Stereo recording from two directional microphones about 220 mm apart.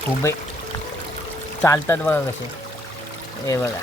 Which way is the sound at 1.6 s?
10° left (ahead or behind).